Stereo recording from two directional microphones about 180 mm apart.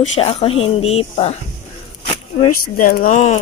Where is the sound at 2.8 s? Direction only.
50° left (ahead or behind).